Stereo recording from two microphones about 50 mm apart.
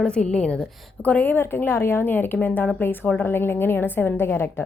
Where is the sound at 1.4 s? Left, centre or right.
Left.